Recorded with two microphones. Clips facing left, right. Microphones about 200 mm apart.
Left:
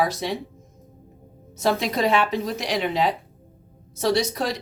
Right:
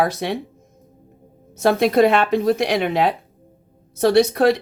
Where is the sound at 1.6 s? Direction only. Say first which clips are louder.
Right 7 dB; 55° right (ahead or behind).